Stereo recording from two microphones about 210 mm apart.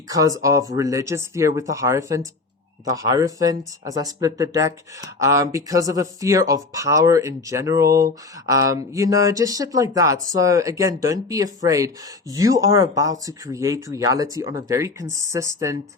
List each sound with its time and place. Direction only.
0.1 s speech: 15° right (ahead or behind)